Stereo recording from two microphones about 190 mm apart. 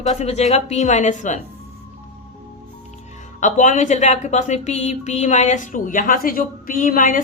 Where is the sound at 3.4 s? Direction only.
40° left (ahead or behind).